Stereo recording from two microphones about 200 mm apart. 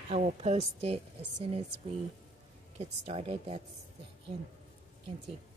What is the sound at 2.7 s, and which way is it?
Speech, 30° right (ahead or behind).